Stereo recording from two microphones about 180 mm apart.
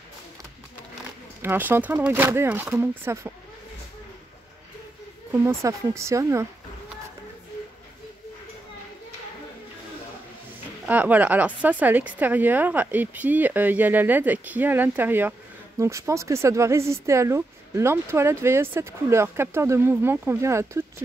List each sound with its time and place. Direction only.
1.4 s speech: 10° right (ahead or behind)
5.3 s speech: 15° right (ahead or behind)
10.9 s speech: 10° right (ahead or behind)